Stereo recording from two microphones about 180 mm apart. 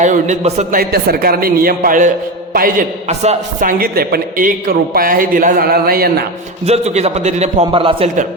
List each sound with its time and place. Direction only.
0.0 s a man's voice: 40° right (ahead or behind)
0.8 s a man's voice: 55° right (ahead or behind)
6.7 s a man's voice: 35° right (ahead or behind)